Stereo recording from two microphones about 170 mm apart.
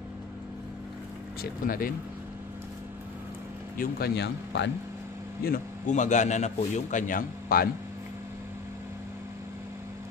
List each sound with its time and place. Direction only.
1.4 s speech: 55° left (ahead or behind)
3.7 s speech: 65° left (ahead or behind); by 4.6 s 85° left
5.4 s a man's voice: 55° left (ahead or behind)